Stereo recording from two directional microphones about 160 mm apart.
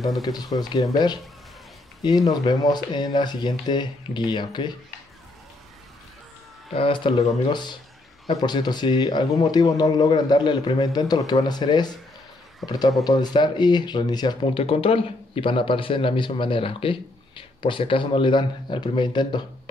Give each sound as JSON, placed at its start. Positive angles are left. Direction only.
{"t": 0.2, "sound": "speech", "side_deg": 25}
{"t": 6.7, "sound": "speech", "side_deg": 35}